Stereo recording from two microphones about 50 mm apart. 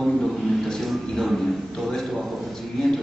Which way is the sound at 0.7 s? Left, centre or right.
Centre.